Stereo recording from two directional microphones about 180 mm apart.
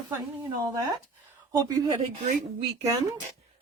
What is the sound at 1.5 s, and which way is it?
Speech, 20° right (ahead or behind).